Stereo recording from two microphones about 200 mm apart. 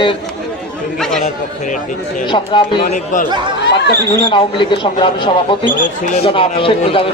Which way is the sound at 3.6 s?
60° left (ahead or behind).